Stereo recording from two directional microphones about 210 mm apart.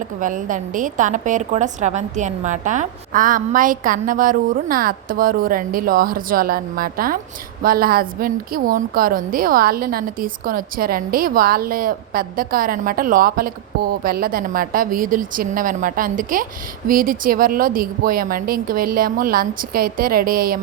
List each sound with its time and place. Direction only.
0.2 s a woman's voice: 40° right (ahead or behind)